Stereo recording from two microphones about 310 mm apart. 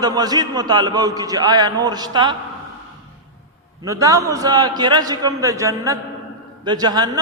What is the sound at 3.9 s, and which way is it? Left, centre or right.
A man's voice, centre.